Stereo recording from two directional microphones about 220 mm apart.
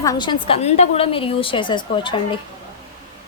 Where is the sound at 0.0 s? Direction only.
20° left (ahead or behind).